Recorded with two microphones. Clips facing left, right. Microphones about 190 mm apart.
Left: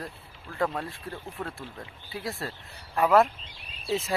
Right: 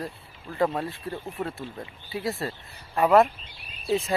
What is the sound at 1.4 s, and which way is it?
Speech, 20° right (ahead or behind).